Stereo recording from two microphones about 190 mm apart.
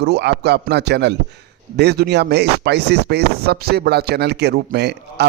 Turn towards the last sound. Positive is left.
turn(degrees=-60)  # may be behind; listen again after turning